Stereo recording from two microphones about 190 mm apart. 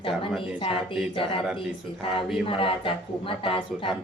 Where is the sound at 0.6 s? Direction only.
25° left (ahead or behind).